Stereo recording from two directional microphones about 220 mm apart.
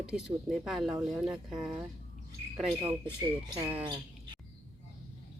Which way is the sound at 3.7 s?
25° right (ahead or behind).